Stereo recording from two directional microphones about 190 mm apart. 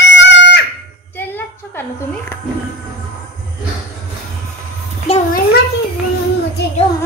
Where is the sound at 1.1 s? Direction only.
10° left (ahead or behind).